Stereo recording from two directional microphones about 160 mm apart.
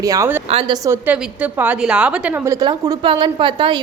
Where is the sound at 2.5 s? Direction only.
25° right (ahead or behind).